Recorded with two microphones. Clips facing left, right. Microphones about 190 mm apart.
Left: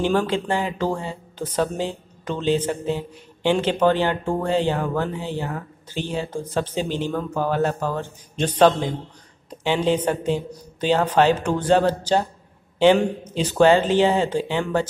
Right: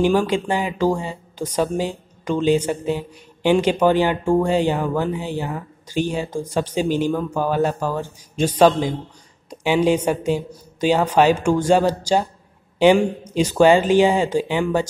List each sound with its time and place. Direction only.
0.0 s a man's voice: 10° right (ahead or behind)